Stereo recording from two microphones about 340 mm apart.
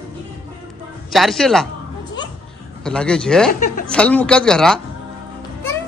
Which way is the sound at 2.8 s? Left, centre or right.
Centre.